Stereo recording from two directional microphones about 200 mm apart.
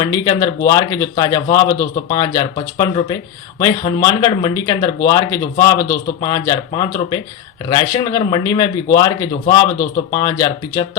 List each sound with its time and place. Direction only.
0.0 s speech: 15° left (ahead or behind)